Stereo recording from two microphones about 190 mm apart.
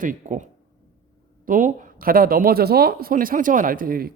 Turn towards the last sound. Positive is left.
turn(degrees=-50)  # may be behind; listen again after turning